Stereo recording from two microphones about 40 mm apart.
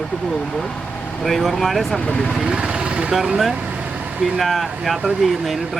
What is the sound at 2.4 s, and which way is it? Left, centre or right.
Vehicle, right.